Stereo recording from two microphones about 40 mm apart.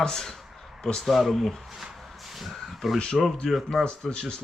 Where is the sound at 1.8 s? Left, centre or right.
Centre.